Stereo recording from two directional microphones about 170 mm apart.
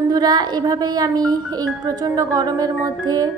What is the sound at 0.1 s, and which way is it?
Speech, 25° right (ahead or behind).